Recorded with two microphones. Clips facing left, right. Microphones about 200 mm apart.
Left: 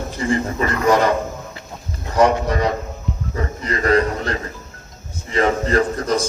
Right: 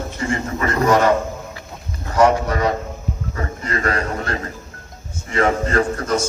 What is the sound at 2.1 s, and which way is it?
Speech, 30° left (ahead or behind).